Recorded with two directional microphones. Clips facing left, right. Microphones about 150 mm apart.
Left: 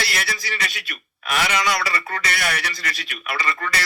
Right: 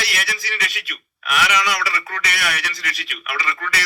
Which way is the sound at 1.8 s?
35° left (ahead or behind).